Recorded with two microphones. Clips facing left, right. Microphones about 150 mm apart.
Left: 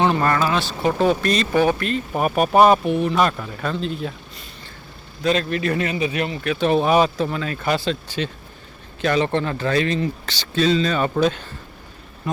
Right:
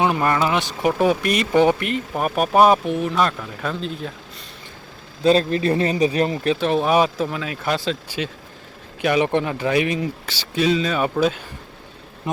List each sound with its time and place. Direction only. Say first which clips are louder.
0.0 s speech: even; 10° right (ahead or behind)
2.1 s speech: left 1 dB; centre (ahead or behind)
5.2 s speech: right 4 dB; 30° right (ahead or behind)
6.6 s speech: left 3 dB; centre (ahead or behind)